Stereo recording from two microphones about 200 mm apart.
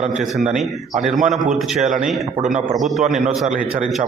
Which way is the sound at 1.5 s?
Centre (ahead or behind).